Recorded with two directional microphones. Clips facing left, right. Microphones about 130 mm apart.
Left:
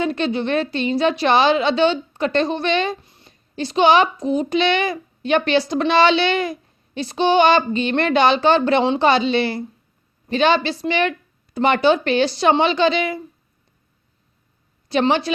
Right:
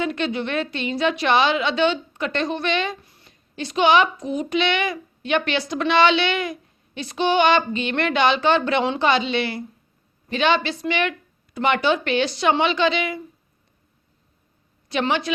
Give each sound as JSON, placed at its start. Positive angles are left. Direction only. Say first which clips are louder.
{"t": 0.0, "sound": "speech", "louder": "left 3 dB", "side_deg": 35}
{"t": 14.8, "sound": "a woman's voice", "louder": "left 5 dB", "side_deg": 35}